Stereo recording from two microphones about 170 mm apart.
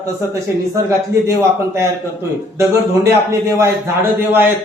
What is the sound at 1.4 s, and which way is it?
Speech, 15° right (ahead or behind).